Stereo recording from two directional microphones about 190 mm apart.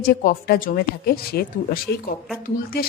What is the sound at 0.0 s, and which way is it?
A woman's voice, 50° left (ahead or behind).